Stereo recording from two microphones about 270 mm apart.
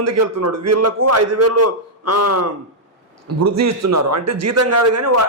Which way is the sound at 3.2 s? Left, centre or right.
Right.